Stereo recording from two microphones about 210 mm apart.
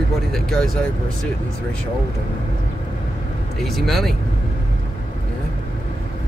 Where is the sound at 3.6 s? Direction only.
Centre (ahead or behind).